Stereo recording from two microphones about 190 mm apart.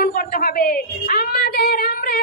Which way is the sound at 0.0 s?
50° left (ahead or behind).